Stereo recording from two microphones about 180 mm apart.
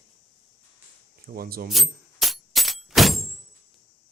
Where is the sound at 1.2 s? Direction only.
55° right (ahead or behind).